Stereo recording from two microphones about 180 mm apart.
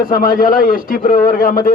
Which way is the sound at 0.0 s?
50° left (ahead or behind).